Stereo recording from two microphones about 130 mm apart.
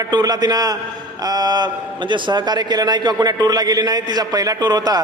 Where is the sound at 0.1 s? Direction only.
30° right (ahead or behind).